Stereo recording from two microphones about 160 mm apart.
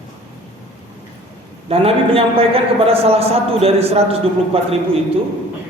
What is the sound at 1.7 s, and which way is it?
A man's voice, 35° right (ahead or behind).